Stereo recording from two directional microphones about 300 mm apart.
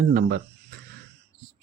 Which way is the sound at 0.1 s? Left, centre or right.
Right.